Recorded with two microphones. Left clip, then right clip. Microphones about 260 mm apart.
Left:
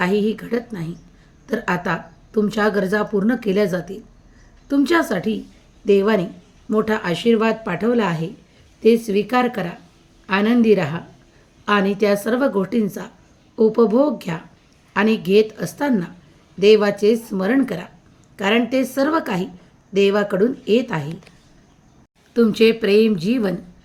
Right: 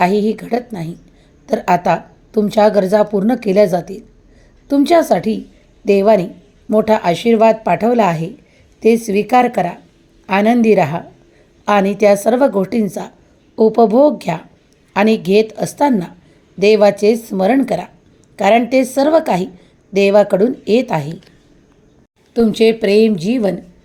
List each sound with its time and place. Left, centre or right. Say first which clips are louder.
0.0 s a woman's voice: right 6 dB; centre
22.3 s speech: right 3 dB; centre